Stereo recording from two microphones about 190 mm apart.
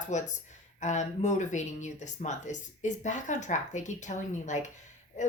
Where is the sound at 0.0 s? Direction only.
40° left (ahead or behind).